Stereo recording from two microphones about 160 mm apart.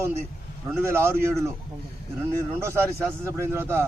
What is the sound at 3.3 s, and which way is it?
Speech, 15° right (ahead or behind).